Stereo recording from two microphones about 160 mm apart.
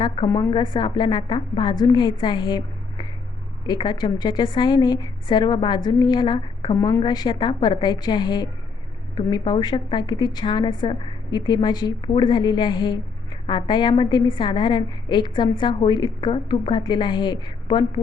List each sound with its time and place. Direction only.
0.3 s a woman's voice: 20° left (ahead or behind)